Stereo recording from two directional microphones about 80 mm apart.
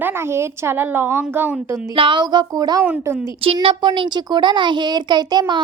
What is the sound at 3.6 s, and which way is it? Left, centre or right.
A child's voice, right.